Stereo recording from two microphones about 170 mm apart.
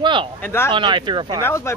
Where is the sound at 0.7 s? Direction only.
30° right (ahead or behind).